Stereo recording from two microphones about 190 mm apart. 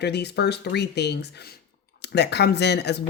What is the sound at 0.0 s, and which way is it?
Speech, 60° left (ahead or behind).